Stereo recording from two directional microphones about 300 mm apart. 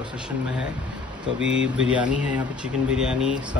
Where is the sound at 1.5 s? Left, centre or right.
Right.